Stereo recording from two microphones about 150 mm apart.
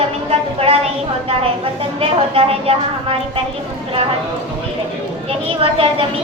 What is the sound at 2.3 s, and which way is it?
Speech, 40° right (ahead or behind).